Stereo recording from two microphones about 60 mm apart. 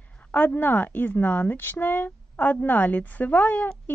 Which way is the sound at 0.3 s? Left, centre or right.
Left.